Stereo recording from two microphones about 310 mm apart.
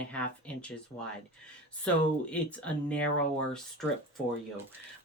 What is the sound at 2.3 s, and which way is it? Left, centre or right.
Speech, centre.